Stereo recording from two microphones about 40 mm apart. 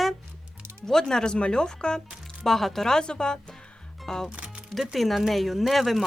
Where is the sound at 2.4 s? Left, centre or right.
Centre.